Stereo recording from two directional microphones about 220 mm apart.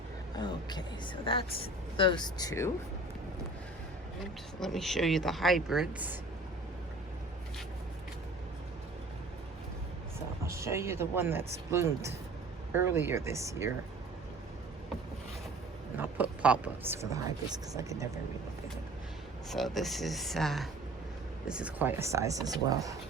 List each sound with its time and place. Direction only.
0.3 s a woman's voice: 20° left (ahead or behind)
4.2 s speech: centre (ahead or behind)
10.4 s speech: 10° right (ahead or behind)
16.0 s speech: 5° right (ahead or behind)
19.5 s speech: centre (ahead or behind); by 23.0 s 15° right (ahead or behind)